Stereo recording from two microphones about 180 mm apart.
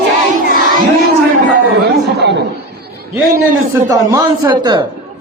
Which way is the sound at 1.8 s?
65° right (ahead or behind).